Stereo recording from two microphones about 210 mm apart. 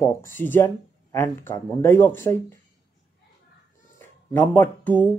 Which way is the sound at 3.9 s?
10° left (ahead or behind).